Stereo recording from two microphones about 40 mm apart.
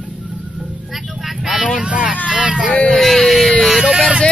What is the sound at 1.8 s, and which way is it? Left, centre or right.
Vehicle, right.